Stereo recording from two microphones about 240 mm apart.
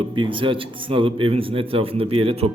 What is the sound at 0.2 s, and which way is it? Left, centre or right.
A man's voice, right.